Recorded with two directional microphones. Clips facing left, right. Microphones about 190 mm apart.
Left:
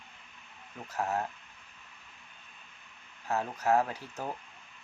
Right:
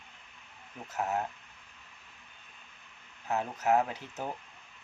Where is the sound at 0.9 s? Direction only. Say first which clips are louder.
Even; 20° right (ahead or behind).